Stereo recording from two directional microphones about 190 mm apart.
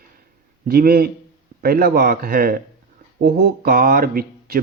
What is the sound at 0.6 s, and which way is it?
Speech, 55° right (ahead or behind).